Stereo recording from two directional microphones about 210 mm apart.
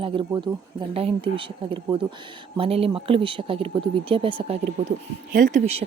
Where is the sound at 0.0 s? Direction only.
25° right (ahead or behind).